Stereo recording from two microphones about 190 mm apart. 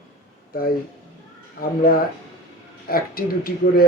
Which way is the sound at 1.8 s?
50° left (ahead or behind).